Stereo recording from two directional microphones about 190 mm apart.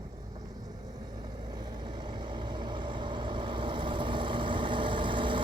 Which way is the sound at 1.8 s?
25° right (ahead or behind).